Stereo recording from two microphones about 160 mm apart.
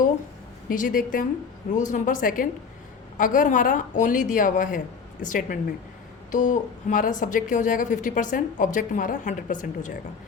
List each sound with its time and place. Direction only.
0.7 s speech: 60° left (ahead or behind)